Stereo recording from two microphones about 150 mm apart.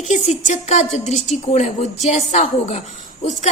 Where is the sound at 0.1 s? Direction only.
55° left (ahead or behind).